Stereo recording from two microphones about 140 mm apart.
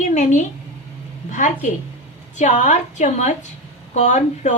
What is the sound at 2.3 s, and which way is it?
A woman's voice, 60° left (ahead or behind).